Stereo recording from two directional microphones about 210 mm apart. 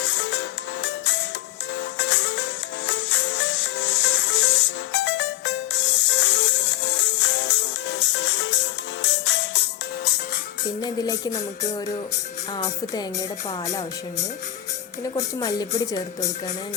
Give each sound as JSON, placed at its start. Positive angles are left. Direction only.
{"t": 0.0, "sound": "music", "side_deg": 55}
{"t": 10.8, "sound": "speech", "side_deg": 20}
{"t": 12.5, "sound": "speech", "side_deg": 20}
{"t": 15.1, "sound": "speech", "side_deg": 20}